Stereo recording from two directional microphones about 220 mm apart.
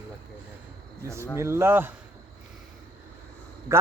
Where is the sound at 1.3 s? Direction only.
10° right (ahead or behind).